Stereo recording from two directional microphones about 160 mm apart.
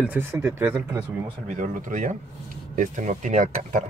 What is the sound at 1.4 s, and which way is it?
Speech, 50° right (ahead or behind).